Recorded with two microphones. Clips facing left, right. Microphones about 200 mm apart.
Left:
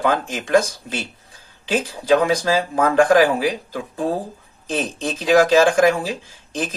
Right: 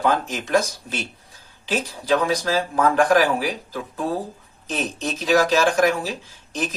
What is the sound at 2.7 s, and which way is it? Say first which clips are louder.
Speech: left 2 dB; 50° left (ahead or behind).